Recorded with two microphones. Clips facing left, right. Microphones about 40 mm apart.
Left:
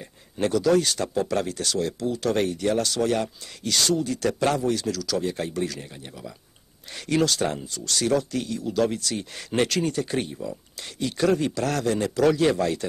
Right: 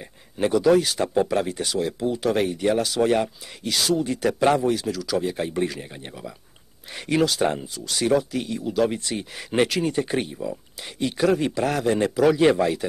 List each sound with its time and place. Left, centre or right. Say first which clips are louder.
0.0 s speech: right 2 dB; centre
4.0 s a man's voice: right 3 dB; right
10.2 s a man's voice: right 3 dB; centre